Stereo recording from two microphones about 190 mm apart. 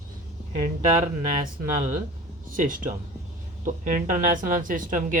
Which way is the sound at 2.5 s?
45° right (ahead or behind).